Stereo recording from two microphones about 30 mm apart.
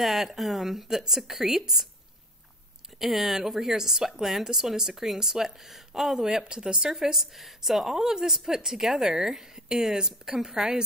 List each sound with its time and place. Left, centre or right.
0.0 s speech: centre
3.0 s speech: centre
6.1 s speech: right
6.9 s speech: centre